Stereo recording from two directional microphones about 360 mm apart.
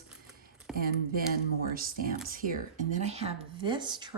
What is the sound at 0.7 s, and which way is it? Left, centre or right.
Speech, right.